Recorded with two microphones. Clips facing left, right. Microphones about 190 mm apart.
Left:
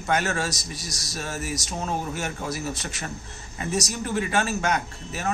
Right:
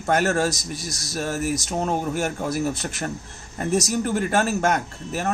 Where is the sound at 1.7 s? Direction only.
55° right (ahead or behind).